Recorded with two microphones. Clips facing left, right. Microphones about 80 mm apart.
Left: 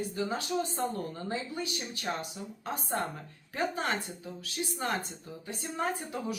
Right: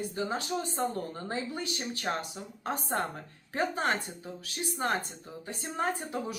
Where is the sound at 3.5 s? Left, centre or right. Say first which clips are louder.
Right 2 dB; right.